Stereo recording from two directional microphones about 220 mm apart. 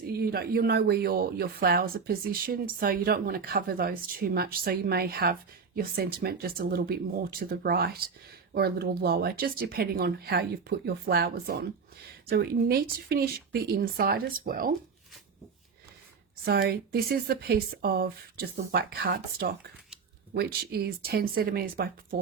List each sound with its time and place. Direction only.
0.0 s speech: 45° right (ahead or behind)
16.5 s speech: 45° right (ahead or behind)